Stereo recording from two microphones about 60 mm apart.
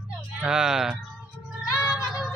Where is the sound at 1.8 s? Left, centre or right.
Left.